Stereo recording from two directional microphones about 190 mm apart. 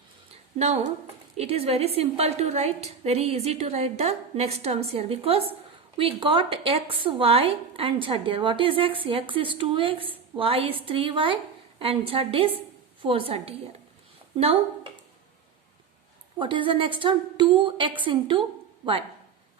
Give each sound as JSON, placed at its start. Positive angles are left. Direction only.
{"t": 1.4, "sound": "a woman's voice", "side_deg": -30}
{"t": 16.4, "sound": "a woman's voice", "side_deg": -25}